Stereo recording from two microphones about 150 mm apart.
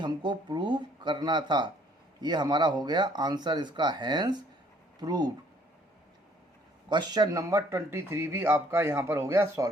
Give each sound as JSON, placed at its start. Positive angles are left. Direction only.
{"t": 0.0, "sound": "speech", "side_deg": -30}
{"t": 6.9, "sound": "speech", "side_deg": -30}